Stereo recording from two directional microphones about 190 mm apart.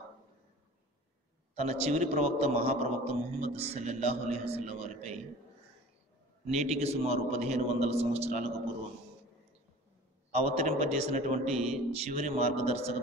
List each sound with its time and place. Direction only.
1.5 s a man's voice: 35° right (ahead or behind)
6.4 s a man's voice: 35° right (ahead or behind)
10.3 s a man's voice: 35° right (ahead or behind)